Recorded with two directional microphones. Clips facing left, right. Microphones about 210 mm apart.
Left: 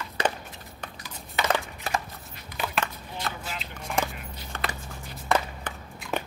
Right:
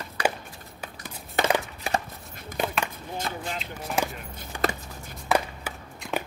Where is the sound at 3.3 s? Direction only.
10° right (ahead or behind).